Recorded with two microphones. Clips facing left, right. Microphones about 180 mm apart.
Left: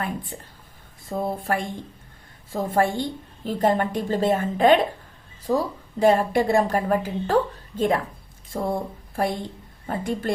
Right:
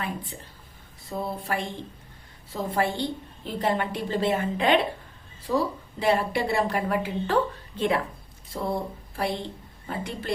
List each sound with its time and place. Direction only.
0.0 s a woman's voice: 50° left (ahead or behind)